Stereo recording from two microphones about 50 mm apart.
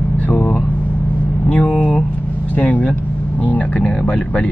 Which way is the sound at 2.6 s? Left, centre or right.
Left.